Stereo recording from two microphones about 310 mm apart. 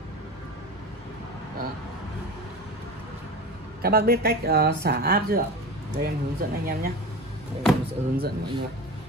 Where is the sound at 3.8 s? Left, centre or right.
Right.